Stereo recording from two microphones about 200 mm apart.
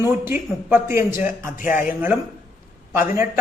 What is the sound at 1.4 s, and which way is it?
Speech, 45° left (ahead or behind).